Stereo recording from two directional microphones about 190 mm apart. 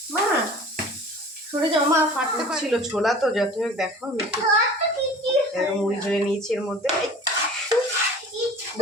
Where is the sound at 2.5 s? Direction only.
5° right (ahead or behind).